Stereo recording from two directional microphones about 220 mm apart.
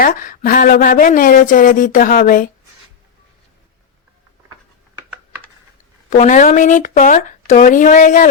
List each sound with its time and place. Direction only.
0.0 s speech: 40° left (ahead or behind)
6.1 s speech: 35° left (ahead or behind)